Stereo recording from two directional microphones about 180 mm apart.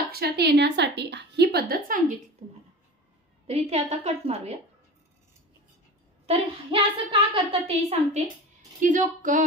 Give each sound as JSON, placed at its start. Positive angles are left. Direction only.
{"t": 0.1, "sound": "a woman's voice", "side_deg": -65}
{"t": 3.4, "sound": "a woman's voice", "side_deg": -35}
{"t": 6.2, "sound": "a woman's voice", "side_deg": -30}
{"t": 8.8, "sound": "speech", "side_deg": -45}